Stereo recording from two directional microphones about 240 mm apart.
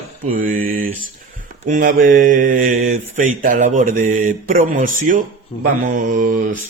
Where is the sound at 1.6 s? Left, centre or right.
Right.